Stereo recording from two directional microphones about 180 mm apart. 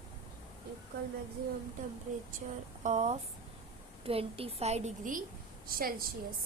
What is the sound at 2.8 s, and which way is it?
A woman's voice, 40° right (ahead or behind).